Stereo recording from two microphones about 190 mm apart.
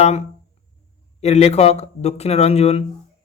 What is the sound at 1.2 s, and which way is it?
Speech, 35° left (ahead or behind).